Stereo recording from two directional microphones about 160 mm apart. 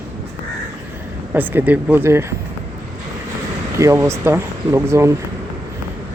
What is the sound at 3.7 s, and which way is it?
Speech, 20° right (ahead or behind).